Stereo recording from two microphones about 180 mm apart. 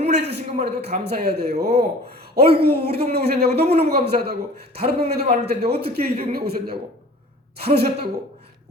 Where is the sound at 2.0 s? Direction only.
60° right (ahead or behind).